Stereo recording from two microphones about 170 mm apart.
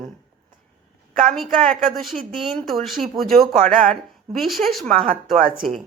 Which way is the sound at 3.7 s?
50° right (ahead or behind).